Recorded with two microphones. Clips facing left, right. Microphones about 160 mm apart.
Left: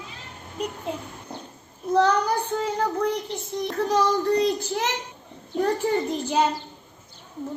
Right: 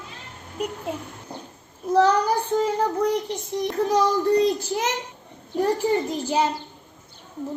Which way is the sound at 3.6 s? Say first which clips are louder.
Right 2 dB; 15° right (ahead or behind).